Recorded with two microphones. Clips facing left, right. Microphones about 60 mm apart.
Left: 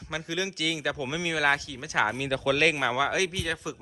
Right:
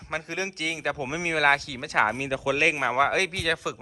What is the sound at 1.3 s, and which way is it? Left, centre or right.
Speech, right.